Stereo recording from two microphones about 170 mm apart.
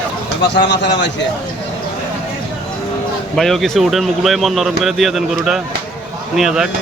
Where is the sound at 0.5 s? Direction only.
90° left.